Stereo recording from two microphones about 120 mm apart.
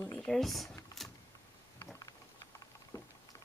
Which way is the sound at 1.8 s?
30° left (ahead or behind).